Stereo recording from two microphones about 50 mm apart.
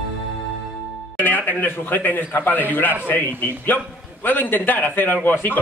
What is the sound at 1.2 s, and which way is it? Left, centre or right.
A man's voice, left.